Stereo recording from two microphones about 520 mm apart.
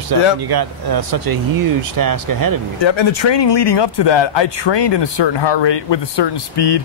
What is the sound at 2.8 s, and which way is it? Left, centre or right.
Speech, left.